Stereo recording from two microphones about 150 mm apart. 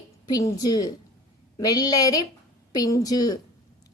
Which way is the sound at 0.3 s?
25° left (ahead or behind).